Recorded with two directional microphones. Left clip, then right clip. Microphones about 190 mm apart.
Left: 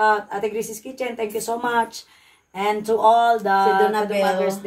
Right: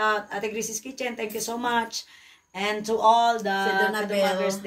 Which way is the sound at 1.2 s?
35° left (ahead or behind).